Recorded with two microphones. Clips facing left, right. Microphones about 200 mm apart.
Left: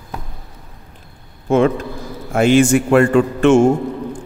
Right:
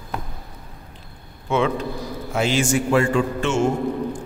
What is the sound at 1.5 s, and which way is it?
A man's voice, 45° left (ahead or behind).